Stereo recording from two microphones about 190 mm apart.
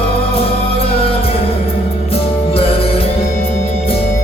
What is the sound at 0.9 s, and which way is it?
Music, 30° left (ahead or behind).